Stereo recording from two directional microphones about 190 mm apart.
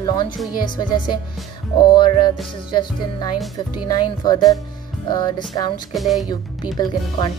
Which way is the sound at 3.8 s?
20° left (ahead or behind).